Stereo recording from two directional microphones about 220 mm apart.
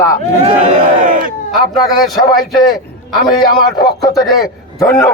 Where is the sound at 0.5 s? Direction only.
40° right (ahead or behind).